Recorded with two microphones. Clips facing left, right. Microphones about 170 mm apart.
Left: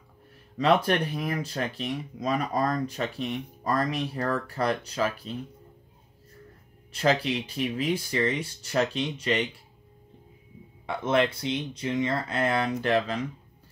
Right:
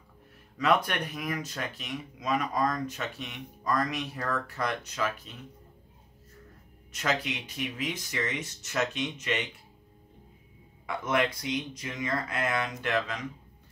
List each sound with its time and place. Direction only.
0.6 s speech: 30° left (ahead or behind)
6.9 s speech: 30° left (ahead or behind)
10.9 s speech: 30° left (ahead or behind)